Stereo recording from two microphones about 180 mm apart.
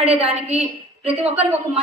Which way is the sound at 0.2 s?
35° right (ahead or behind).